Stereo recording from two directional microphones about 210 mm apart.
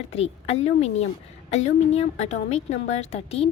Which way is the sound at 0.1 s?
30° left (ahead or behind).